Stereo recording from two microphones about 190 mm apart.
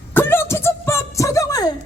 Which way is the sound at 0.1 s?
10° left (ahead or behind).